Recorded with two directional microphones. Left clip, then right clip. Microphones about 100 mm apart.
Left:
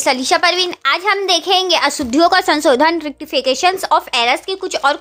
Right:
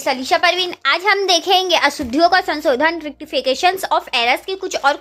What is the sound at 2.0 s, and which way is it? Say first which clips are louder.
Speech: left 2 dB; 30° left (ahead or behind).